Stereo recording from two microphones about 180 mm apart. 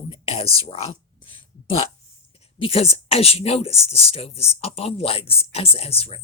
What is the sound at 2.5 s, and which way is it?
Speech, 30° left (ahead or behind).